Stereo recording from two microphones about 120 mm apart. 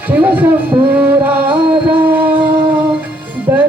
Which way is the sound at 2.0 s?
15° right (ahead or behind).